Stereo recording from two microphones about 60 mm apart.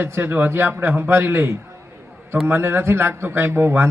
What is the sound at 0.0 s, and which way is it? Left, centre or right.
A man's voice, right.